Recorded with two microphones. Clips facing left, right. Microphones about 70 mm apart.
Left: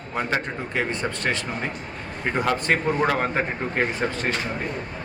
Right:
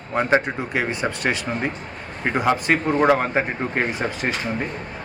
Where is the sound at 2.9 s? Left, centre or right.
Centre.